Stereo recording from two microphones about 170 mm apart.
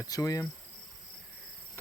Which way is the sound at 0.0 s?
20° left (ahead or behind).